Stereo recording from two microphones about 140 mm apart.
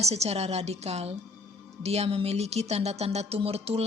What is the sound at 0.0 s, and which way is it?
Speech, 50° right (ahead or behind).